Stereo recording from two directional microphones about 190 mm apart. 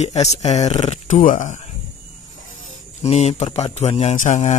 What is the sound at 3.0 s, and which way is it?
Speech, 35° left (ahead or behind).